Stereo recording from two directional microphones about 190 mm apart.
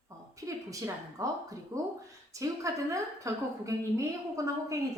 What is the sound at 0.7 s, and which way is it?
A woman's voice, 15° right (ahead or behind).